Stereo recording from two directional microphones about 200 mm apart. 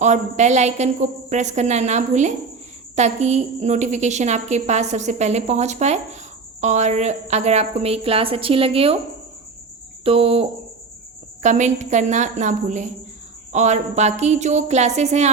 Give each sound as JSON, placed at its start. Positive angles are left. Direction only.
{"t": 0.0, "sound": "a woman's voice", "side_deg": -35}
{"t": 10.0, "sound": "a woman's voice", "side_deg": -30}